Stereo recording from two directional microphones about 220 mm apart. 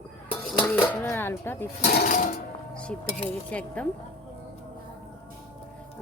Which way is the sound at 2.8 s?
5° left (ahead or behind).